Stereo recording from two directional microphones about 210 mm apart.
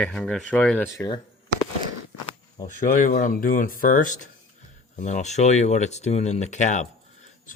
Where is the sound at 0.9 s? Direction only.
20° left (ahead or behind).